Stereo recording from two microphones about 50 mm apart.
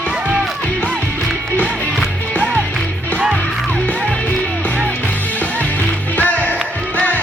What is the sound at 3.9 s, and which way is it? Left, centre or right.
Music, left.